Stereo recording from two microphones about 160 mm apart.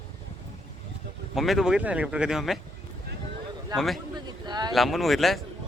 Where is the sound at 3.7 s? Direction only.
Centre (ahead or behind).